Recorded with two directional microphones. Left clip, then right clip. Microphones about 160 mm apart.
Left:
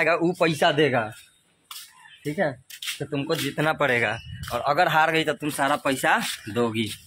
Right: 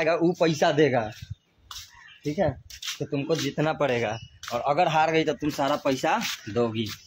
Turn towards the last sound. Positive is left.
turn(degrees=0)  # may be behind; listen again after turning